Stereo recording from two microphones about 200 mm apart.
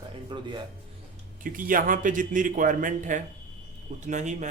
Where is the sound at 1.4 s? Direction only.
45° right (ahead or behind).